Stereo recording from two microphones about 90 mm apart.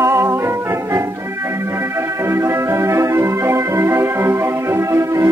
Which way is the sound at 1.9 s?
30° right (ahead or behind).